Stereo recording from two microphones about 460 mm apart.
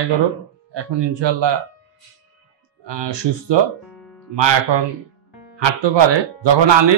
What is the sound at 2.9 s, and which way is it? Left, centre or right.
Speech, right.